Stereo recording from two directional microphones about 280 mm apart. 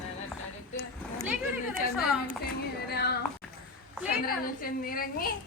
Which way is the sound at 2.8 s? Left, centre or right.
Left.